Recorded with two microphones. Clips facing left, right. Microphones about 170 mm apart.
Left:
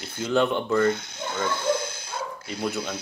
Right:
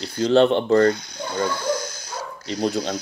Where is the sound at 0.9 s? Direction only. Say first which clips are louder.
Right 3 dB; 25° left (ahead or behind).